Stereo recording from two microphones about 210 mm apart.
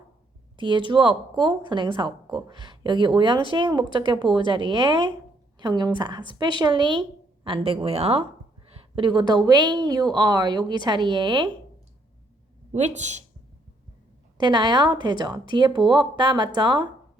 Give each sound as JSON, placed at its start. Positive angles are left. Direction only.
{"t": 0.5, "sound": "speech", "side_deg": -20}
{"t": 12.7, "sound": "speech", "side_deg": -35}
{"t": 14.3, "sound": "speech", "side_deg": -20}